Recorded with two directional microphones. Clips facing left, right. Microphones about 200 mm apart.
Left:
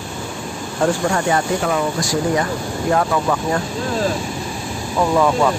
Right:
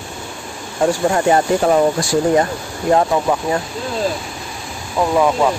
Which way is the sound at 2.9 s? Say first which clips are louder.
Right 3 dB; 25° right (ahead or behind).